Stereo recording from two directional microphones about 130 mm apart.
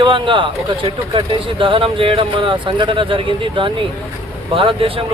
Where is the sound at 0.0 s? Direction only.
40° right (ahead or behind).